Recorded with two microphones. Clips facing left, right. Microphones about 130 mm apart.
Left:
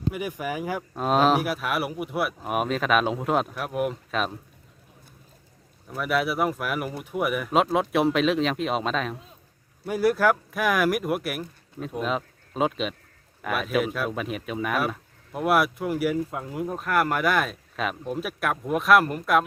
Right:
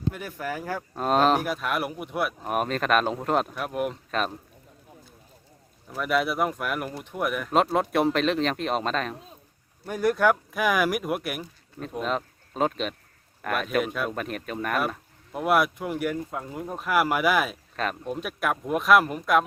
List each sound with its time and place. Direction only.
0.1 s speech: 15° left (ahead or behind)
0.9 s speech: centre (ahead or behind)
5.9 s speech: centre (ahead or behind)